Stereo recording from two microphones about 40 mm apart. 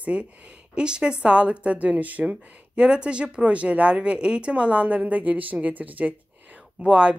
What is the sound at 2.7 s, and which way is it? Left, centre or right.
A woman's voice, right.